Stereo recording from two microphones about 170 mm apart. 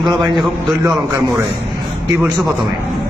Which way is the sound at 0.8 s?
15° right (ahead or behind).